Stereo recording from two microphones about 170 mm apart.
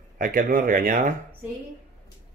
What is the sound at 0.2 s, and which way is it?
Speech, 50° right (ahead or behind).